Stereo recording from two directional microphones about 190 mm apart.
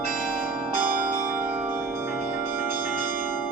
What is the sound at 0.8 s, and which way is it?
Change ringing, 50° right (ahead or behind).